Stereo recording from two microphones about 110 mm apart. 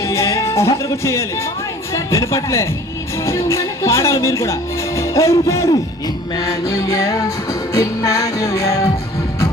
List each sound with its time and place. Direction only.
0.0 s music: 25° left (ahead or behind)
1.9 s a woman's voice: 30° left (ahead or behind)
3.2 s music: 25° left (ahead or behind)